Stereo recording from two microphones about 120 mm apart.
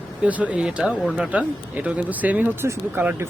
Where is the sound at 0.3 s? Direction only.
10° right (ahead or behind).